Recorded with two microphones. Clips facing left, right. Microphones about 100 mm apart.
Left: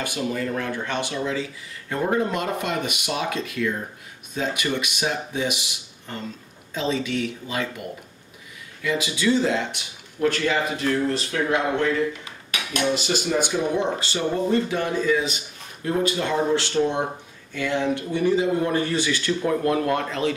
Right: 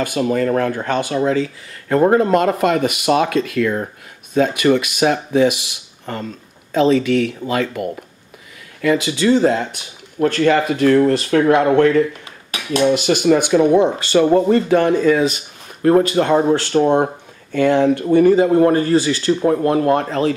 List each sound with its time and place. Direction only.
0.0 s speech: 50° right (ahead or behind); by 3.9 s 70° right (ahead or behind)
4.3 s speech: 55° right (ahead or behind)
8.8 s speech: 55° right (ahead or behind)
12.4 s cutlery: 30° right (ahead or behind)
12.9 s speech: 60° right (ahead or behind); by 20.3 s 40° right (ahead or behind)